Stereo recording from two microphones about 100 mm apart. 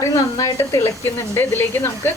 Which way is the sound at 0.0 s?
30° left (ahead or behind).